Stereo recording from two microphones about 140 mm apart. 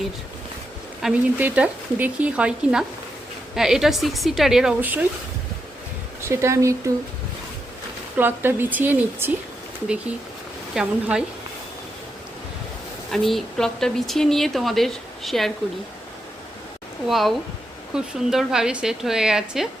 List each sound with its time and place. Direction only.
1.0 s speech: 10° right (ahead or behind)
6.2 s speech: 20° right (ahead or behind)
8.1 s speech: 15° right (ahead or behind)
10.8 s speech: 5° right (ahead or behind)
13.1 s speech: centre (ahead or behind)
17.1 s speech: centre (ahead or behind)